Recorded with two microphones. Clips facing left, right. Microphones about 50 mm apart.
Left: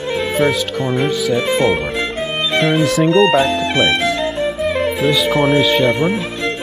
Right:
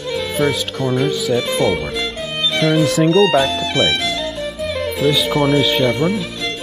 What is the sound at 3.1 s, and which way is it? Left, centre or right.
Speech, left.